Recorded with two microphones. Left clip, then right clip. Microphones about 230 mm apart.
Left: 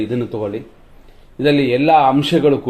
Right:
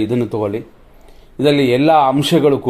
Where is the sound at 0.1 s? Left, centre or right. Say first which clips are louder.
Right 3 dB; right.